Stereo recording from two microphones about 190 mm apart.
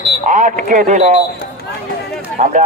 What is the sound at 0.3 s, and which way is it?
Speech, 40° right (ahead or behind).